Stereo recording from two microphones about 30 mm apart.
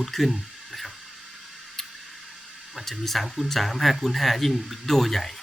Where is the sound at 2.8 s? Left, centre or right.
Centre.